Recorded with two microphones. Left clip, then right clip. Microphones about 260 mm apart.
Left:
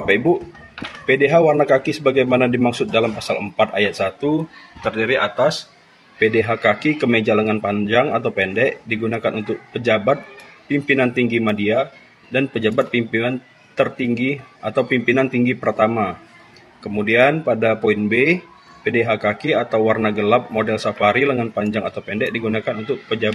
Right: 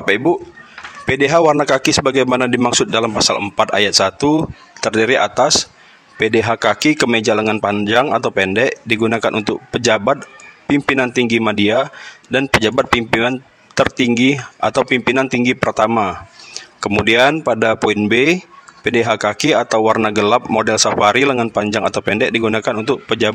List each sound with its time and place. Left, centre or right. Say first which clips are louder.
1.0 s speech: right 2 dB; right